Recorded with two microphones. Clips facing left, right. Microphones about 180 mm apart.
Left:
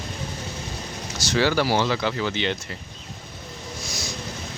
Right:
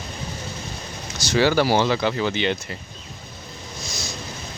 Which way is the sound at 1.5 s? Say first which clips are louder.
Right 3 dB; 25° right (ahead or behind).